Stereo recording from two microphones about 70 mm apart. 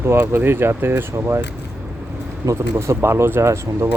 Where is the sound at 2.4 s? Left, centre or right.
Right.